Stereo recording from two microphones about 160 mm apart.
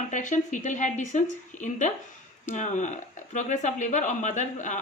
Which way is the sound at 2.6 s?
50° left (ahead or behind).